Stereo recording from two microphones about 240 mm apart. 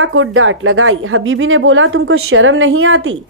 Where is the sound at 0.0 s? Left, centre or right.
Right.